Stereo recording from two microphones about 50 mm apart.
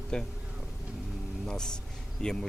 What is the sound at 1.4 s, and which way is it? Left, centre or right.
Speech, centre.